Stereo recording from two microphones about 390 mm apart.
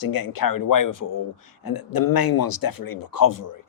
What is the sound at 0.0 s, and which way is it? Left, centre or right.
Speech, left.